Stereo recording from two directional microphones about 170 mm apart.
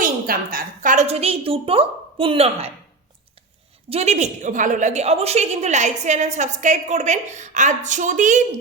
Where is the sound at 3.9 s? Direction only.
40° right (ahead or behind).